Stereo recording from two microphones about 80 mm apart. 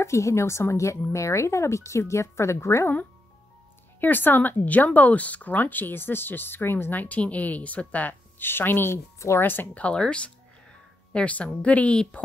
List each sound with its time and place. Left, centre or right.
0.0 s speech: left
4.0 s speech: left
9.8 s a woman's voice: centre